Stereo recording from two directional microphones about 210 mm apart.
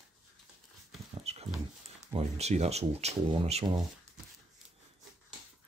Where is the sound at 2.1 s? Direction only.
30° right (ahead or behind).